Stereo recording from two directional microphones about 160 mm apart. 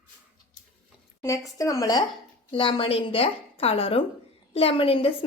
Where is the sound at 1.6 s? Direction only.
20° left (ahead or behind).